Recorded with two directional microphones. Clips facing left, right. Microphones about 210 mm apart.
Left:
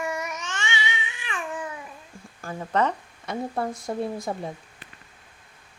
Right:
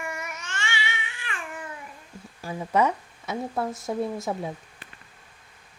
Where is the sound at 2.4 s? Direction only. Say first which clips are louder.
Right 1 dB; 10° right (ahead or behind).